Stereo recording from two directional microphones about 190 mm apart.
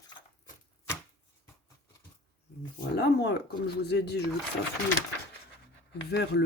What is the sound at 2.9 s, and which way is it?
Speech, 60° left (ahead or behind).